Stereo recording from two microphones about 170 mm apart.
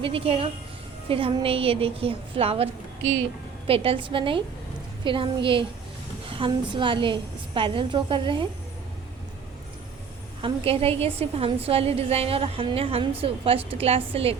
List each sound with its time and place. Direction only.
0.0 s a woman's voice: 35° right (ahead or behind)
3.7 s a woman's voice: 30° right (ahead or behind)
10.4 s a woman's voice: 35° right (ahead or behind)